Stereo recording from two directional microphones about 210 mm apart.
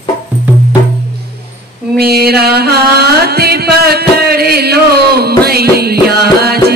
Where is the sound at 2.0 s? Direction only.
45° right (ahead or behind).